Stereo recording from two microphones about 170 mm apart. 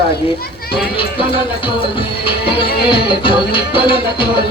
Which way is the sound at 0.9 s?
30° left (ahead or behind).